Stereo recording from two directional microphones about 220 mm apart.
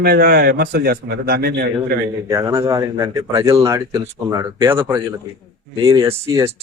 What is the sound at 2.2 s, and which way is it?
A man's voice, 15° right (ahead or behind).